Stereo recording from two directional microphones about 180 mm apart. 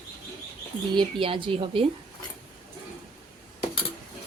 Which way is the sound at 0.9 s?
30° right (ahead or behind).